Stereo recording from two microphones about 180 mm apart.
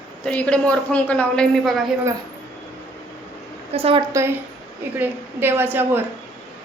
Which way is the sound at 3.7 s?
35° right (ahead or behind).